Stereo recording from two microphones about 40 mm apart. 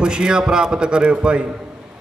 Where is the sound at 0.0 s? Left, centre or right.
Right.